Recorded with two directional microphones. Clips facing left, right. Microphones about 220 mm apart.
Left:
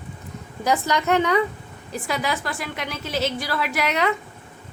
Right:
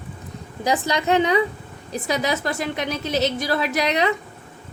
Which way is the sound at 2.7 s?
20° right (ahead or behind).